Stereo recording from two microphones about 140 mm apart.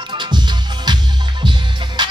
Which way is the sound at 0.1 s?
35° right (ahead or behind).